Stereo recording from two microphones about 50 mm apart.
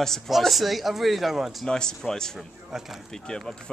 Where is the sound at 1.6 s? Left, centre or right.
Centre.